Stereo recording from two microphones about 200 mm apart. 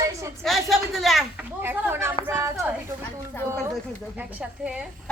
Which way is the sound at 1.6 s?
10° right (ahead or behind).